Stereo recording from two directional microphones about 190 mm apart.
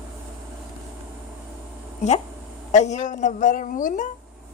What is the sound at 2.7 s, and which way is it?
A woman's voice, 40° left (ahead or behind).